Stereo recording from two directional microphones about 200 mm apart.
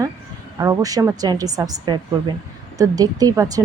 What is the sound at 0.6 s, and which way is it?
A woman's voice, 15° right (ahead or behind).